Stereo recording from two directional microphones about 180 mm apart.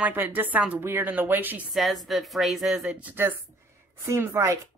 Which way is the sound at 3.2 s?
10° right (ahead or behind).